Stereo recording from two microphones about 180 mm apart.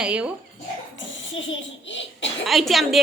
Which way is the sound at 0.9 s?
90° left.